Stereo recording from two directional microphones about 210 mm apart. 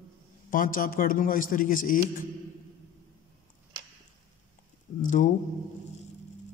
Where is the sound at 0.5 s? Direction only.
40° left (ahead or behind).